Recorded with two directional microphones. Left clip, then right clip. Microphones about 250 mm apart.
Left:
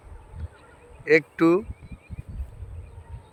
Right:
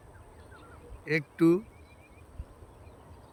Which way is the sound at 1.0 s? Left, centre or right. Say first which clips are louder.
Left 7 dB; centre.